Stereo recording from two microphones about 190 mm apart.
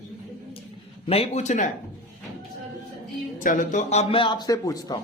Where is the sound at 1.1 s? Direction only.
35° left (ahead or behind).